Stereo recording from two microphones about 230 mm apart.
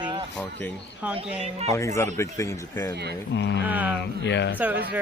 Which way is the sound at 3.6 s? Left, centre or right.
Centre.